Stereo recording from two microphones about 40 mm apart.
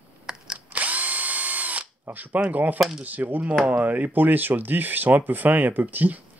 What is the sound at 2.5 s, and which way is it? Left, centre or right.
Speech, right.